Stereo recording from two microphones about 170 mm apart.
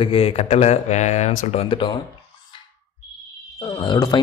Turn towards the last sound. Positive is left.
turn(degrees=25)  # may be behind; listen again after turning